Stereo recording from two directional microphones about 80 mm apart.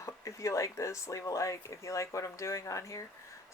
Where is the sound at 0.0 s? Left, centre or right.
Left.